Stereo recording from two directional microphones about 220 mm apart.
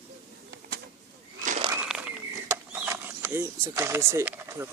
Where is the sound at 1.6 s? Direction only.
15° right (ahead or behind).